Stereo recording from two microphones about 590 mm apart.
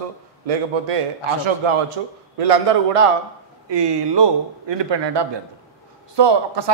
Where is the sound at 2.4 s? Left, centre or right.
Right.